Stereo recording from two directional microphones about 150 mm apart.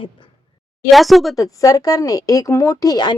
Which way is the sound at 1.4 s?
25° left (ahead or behind).